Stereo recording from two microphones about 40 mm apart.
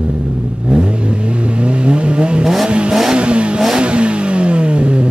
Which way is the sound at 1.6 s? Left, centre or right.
Right.